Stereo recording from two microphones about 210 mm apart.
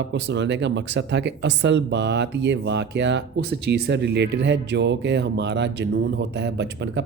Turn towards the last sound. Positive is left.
turn(degrees=-55)  # may be behind; listen again after turning